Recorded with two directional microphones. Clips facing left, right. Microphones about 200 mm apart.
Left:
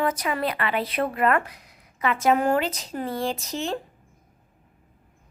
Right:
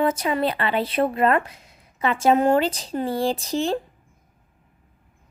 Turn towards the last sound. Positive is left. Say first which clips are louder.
# right 5 dB
turn(degrees=-35)  # may be behind; listen again after turning